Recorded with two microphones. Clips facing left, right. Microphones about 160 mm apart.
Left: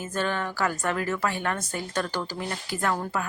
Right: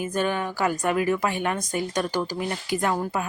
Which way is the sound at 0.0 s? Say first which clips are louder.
Right 3 dB; 15° right (ahead or behind).